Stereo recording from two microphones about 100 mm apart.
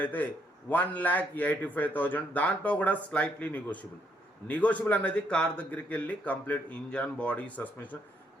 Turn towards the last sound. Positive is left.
turn(degrees=15)  # may be behind; listen again after turning